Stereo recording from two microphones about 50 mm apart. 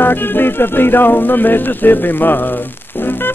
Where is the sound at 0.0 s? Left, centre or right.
Left.